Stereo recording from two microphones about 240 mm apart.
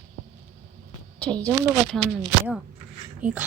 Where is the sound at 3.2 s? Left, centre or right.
Centre.